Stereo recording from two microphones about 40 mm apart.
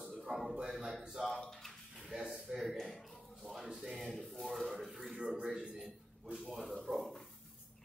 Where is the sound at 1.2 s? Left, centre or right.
Centre.